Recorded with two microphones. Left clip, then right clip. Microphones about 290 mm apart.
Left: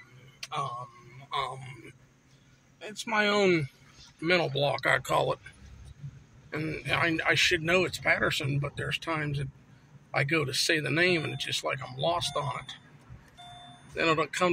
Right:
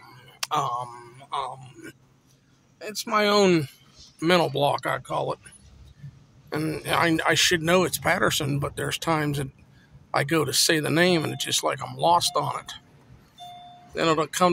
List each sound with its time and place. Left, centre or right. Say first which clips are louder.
0.4 s a sound: right 8 dB; right
1.3 s speech: right 2 dB; centre
2.8 s speech: right 4 dB; right
4.8 s speech: left 1 dB; centre
6.5 s speech: right 5 dB; right
13.9 s speech: right 4 dB; centre